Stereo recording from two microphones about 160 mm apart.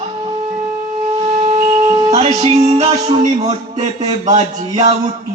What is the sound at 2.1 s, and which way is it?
Music, 40° right (ahead or behind).